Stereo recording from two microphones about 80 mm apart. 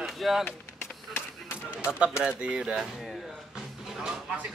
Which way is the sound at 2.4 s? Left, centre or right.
Centre.